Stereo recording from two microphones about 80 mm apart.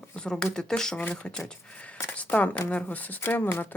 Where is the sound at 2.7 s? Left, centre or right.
Centre.